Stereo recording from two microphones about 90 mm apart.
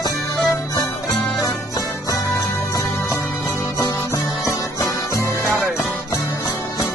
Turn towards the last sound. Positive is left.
turn(degrees=-10)  # may be behind; listen again after turning